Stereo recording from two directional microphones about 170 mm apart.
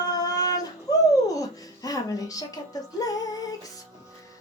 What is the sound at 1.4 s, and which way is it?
Music, 20° left (ahead or behind).